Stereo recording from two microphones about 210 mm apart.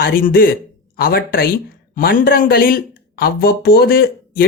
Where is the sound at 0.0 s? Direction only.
45° left (ahead or behind).